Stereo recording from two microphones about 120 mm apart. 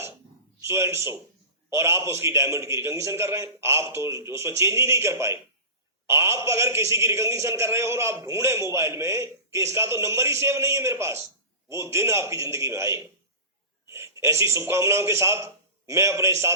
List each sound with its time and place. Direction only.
0.6 s a man's voice: 20° right (ahead or behind)